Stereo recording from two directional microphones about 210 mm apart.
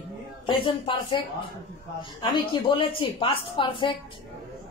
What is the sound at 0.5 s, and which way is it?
A woman's voice, 25° left (ahead or behind).